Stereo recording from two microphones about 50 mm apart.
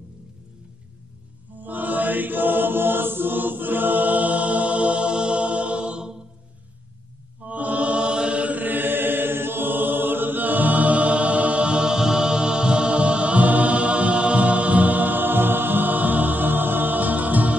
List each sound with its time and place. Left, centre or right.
1.6 s chant: right; by 6.1 s centre
7.4 s mantra: right